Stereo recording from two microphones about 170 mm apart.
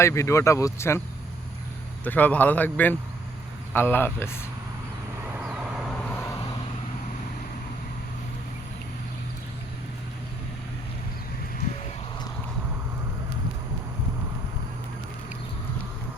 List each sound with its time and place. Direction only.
0.0 s speech: 15° left (ahead or behind)
2.0 s speech: 10° left (ahead or behind)
5.4 s vehicle: 5° right (ahead or behind)